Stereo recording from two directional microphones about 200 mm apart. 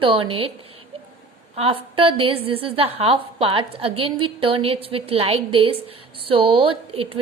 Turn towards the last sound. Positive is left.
turn(degrees=-25)  # may be behind; listen again after turning